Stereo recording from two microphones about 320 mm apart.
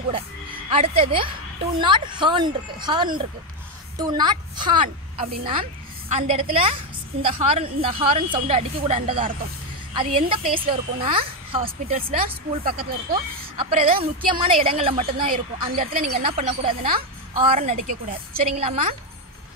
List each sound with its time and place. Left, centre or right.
0.7 s a woman's voice: centre